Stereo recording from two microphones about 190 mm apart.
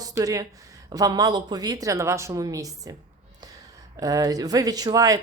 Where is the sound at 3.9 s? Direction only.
20° right (ahead or behind).